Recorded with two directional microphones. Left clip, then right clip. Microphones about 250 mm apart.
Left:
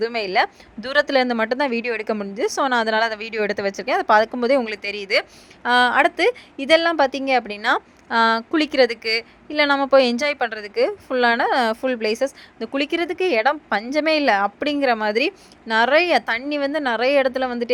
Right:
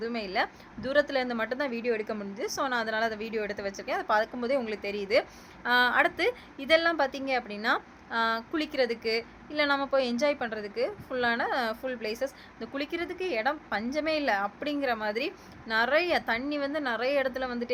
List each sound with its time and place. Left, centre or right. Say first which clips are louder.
0.0 s a woman's voice: left 10 dB; left